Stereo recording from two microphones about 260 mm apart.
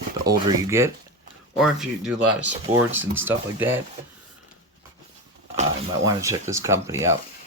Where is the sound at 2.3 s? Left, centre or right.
Right.